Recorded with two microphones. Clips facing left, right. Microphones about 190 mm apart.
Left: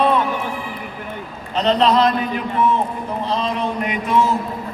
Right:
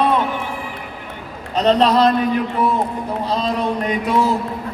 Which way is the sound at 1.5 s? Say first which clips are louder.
Right 1 dB; 40° right (ahead or behind).